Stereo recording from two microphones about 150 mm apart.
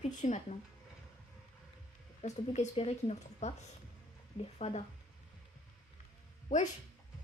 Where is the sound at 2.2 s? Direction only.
45° left (ahead or behind).